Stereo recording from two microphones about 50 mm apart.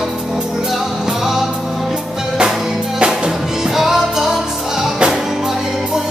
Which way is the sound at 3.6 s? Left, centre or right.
Centre.